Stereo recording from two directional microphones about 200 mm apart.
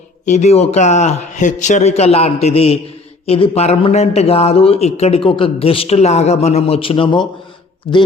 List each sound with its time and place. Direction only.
0.3 s a man's voice: 35° left (ahead or behind)